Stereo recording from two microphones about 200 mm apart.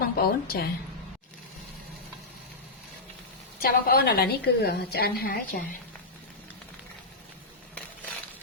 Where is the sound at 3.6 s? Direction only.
50° left (ahead or behind).